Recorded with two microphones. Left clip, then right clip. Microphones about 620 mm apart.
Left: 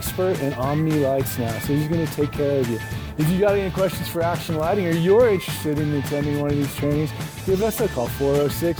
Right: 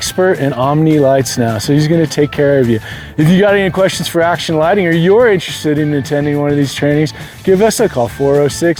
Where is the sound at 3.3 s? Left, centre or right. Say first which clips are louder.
Right 9 dB; right.